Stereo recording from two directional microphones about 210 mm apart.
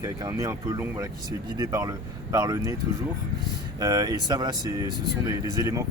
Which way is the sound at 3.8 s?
15° right (ahead or behind).